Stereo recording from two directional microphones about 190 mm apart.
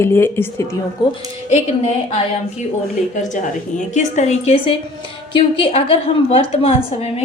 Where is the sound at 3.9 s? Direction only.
35° left (ahead or behind).